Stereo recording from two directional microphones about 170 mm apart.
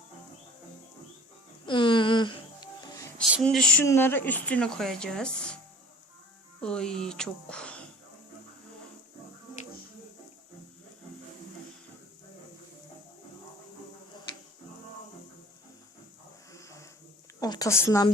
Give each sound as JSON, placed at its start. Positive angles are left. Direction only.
{"t": 1.6, "sound": "music", "side_deg": 30}
{"t": 3.4, "sound": "speech", "side_deg": 5}
{"t": 6.6, "sound": "speech", "side_deg": 5}
{"t": 16.5, "sound": "a sound", "side_deg": 20}
{"t": 17.4, "sound": "a woman's voice", "side_deg": 20}